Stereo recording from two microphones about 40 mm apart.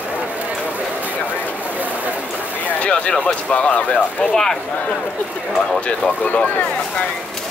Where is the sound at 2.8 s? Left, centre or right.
Left.